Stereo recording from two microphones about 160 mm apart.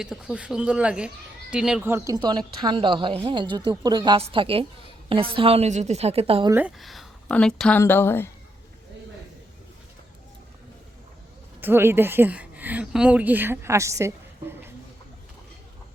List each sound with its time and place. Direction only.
0.0 s a woman's voice: 5° right (ahead or behind)
1.9 s a woman's voice: 20° right (ahead or behind); by 6.5 s 35° right (ahead or behind)
6.5 s a woman's voice: 10° right (ahead or behind); by 8.3 s 15° left (ahead or behind)
11.6 s a woman's voice: 15° right (ahead or behind)